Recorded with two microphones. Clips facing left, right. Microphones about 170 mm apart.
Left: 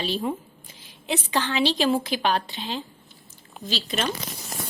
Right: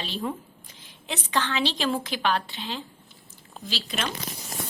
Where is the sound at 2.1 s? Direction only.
35° left (ahead or behind).